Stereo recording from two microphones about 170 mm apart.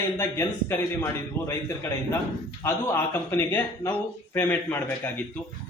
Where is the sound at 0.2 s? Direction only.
15° left (ahead or behind).